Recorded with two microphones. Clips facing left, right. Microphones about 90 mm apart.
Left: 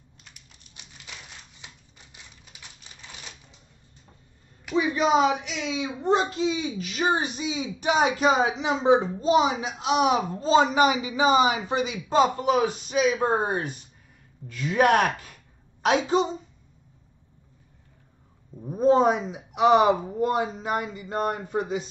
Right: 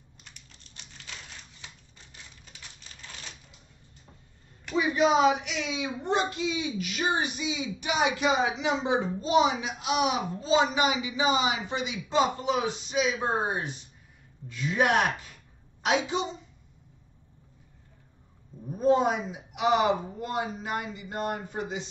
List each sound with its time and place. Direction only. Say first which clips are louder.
0.2 s typing: even; 10° left (ahead or behind)
2.4 s typewriter: left 1 dB; 15° left (ahead or behind)
4.7 s a sound: left 2 dB; 35° left (ahead or behind)
5.3 s a man's voice: left 2 dB; 30° left (ahead or behind)
18.7 s a man's voice: left 4 dB; 35° left (ahead or behind)